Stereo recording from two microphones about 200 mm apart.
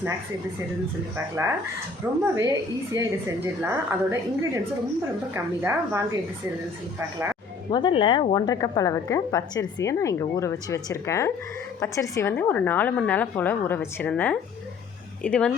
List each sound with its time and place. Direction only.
2.3 s a woman's voice: 15° right (ahead or behind)
7.7 s a woman's voice: 25° left (ahead or behind); by 15.5 s 5° left (ahead or behind)